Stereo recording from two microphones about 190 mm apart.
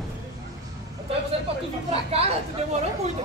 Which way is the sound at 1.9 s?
30° right (ahead or behind).